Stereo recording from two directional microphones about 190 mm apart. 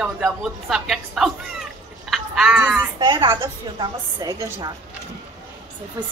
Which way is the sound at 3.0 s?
25° right (ahead or behind).